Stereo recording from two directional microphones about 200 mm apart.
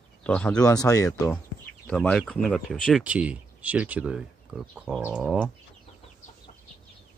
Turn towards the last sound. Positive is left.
turn(degrees=-5)  # may be behind; listen again after turning